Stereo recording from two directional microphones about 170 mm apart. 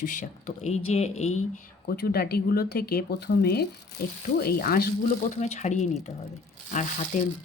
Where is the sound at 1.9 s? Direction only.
65° left (ahead or behind).